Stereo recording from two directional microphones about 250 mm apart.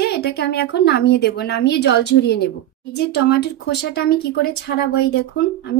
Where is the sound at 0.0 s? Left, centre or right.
Left.